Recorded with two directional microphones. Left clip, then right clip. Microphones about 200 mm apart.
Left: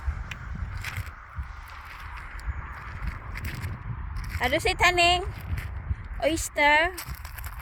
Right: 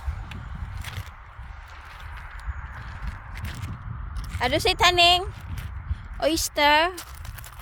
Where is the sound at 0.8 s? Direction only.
5° right (ahead or behind).